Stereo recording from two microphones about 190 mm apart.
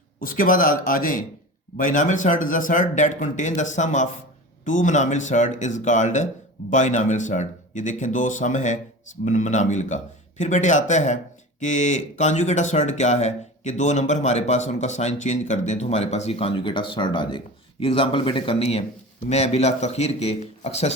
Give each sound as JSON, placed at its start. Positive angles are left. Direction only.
{"t": 0.2, "sound": "a man's voice", "side_deg": 45}